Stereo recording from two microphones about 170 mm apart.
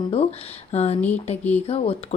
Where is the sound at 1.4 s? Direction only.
10° left (ahead or behind).